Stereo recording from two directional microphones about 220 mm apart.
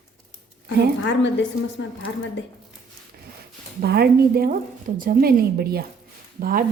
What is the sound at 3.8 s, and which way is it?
A woman's voice, 45° right (ahead or behind).